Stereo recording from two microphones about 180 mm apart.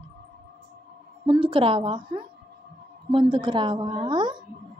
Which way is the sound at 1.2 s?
30° right (ahead or behind).